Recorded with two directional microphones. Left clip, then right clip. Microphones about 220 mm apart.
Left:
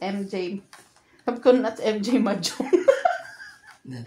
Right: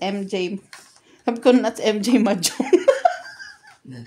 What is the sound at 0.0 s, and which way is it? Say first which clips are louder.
Speech: right 5 dB; 45° right (ahead or behind).